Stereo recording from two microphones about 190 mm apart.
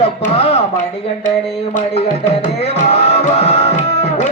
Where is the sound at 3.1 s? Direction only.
35° left (ahead or behind).